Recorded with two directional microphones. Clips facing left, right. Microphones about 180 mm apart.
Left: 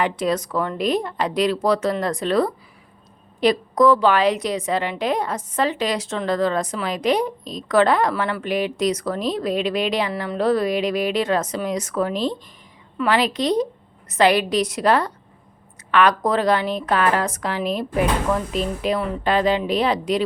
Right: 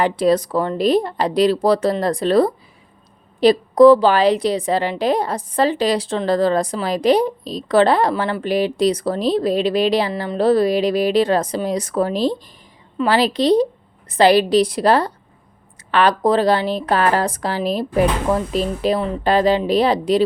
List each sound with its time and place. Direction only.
0.0 s a woman's voice: 35° right (ahead or behind)